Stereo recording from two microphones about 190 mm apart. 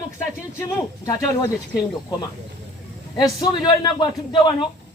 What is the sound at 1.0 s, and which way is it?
Speech, 20° left (ahead or behind).